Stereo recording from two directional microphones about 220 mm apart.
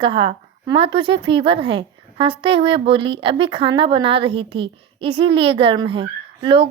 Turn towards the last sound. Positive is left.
turn(degrees=-25)  # may be behind; listen again after turning